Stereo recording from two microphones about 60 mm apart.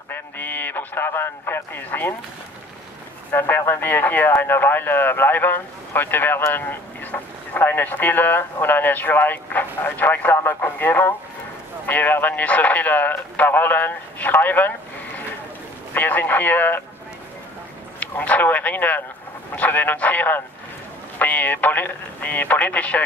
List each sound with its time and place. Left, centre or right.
0.1 s a sound: left
1.9 s speech: left
3.3 s speech: left
15.9 s speech: left
18.0 s speech: left